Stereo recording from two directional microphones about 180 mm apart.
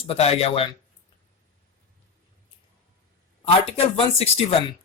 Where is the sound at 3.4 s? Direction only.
35° left (ahead or behind).